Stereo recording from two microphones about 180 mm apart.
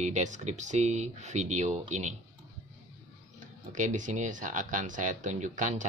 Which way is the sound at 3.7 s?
45° right (ahead or behind).